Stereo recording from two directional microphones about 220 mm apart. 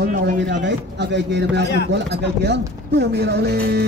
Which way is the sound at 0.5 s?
55° right (ahead or behind).